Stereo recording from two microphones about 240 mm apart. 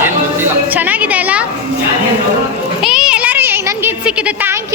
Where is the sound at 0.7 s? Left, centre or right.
Centre.